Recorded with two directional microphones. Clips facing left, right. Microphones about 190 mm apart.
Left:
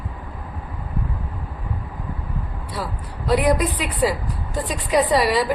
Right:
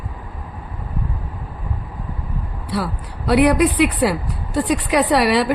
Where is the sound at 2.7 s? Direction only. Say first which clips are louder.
Right 6 dB; 70° right (ahead or behind).